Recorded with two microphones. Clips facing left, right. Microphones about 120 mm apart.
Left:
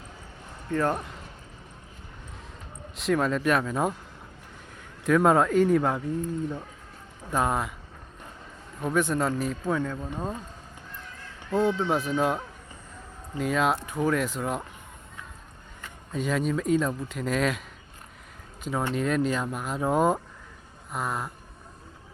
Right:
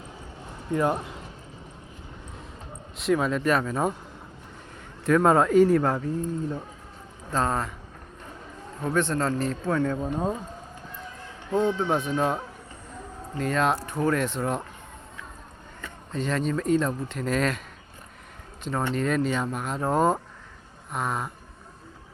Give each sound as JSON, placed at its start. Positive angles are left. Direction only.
{"t": 0.7, "sound": "speech", "side_deg": -15}
{"t": 3.0, "sound": "speech", "side_deg": 0}
{"t": 5.0, "sound": "speech", "side_deg": 0}
{"t": 7.3, "sound": "a man's voice", "side_deg": 15}
{"t": 9.0, "sound": "a man's voice", "side_deg": 10}
{"t": 10.0, "sound": "speech", "side_deg": -20}
{"t": 11.9, "sound": "speech", "side_deg": 5}
{"t": 16.1, "sound": "speech", "side_deg": 5}
{"t": 18.6, "sound": "speech", "side_deg": 5}